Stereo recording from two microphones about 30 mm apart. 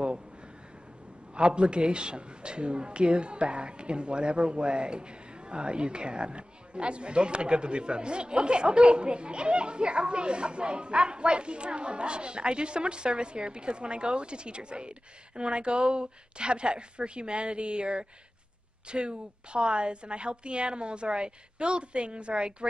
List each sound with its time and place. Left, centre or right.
1.3 s a man's voice: right